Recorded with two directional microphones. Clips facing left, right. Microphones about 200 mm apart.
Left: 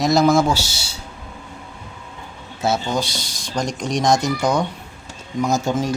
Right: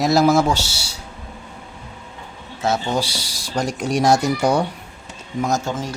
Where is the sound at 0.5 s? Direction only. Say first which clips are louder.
Even; 15° left (ahead or behind).